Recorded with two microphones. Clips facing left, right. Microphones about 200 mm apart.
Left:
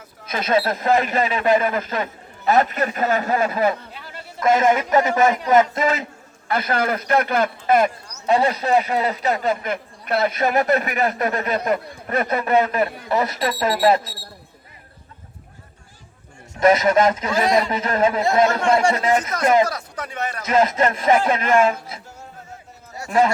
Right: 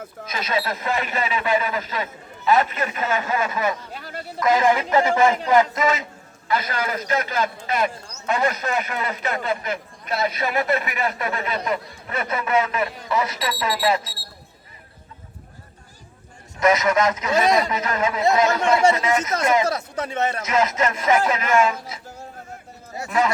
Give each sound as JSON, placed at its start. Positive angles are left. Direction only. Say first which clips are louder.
{"t": 0.3, "sound": "a man's voice", "louder": "left 5 dB", "side_deg": 50}
{"t": 3.9, "sound": "a sound", "louder": "right 4 dB", "side_deg": -40}
{"t": 4.4, "sound": "speech", "louder": "left 2 dB", "side_deg": 25}
{"t": 5.8, "sound": "a man's voice", "louder": "left 1 dB", "side_deg": 35}
{"t": 6.5, "sound": "a man's voice", "louder": "left 3 dB", "side_deg": 55}
{"t": 8.3, "sound": "a man's voice", "louder": "left 5 dB", "side_deg": 30}
{"t": 16.6, "sound": "a man's voice", "louder": "left 3 dB", "side_deg": 30}
{"t": 19.6, "sound": "speech", "louder": "right 4 dB", "side_deg": -25}
{"t": 20.4, "sound": "a man's voice", "louder": "left 6 dB", "side_deg": 30}
{"t": 23.0, "sound": "a man's voice", "louder": "left 4 dB", "side_deg": 30}